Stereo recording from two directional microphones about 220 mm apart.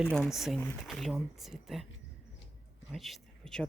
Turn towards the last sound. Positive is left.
turn(degrees=5)  # may be behind; listen again after turning